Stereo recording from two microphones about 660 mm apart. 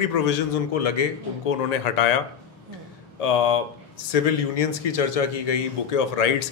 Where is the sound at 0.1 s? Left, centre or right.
Left.